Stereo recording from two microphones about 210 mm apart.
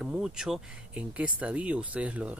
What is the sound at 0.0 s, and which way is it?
Speech, 5° right (ahead or behind).